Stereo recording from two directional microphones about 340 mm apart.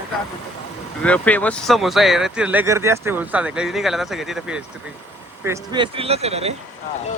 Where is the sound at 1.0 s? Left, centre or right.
Centre.